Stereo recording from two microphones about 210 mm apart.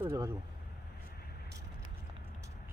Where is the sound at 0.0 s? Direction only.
15° right (ahead or behind).